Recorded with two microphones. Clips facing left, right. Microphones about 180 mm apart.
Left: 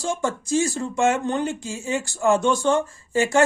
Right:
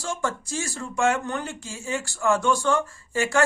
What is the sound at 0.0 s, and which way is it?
Speech, 20° left (ahead or behind).